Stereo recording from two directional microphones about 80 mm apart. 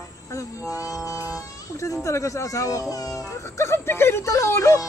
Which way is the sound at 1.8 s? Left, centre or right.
Left.